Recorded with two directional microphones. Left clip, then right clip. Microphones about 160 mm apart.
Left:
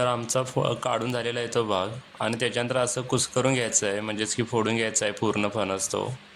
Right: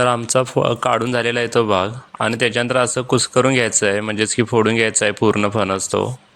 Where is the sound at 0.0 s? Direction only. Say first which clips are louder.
Right 9 dB; 40° right (ahead or behind).